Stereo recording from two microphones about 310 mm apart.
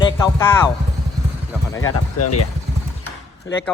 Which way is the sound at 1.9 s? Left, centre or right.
Left.